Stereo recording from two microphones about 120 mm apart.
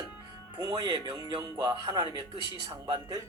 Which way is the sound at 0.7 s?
35° right (ahead or behind).